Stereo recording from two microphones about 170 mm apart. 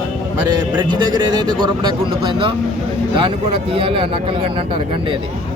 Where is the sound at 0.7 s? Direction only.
25° right (ahead or behind).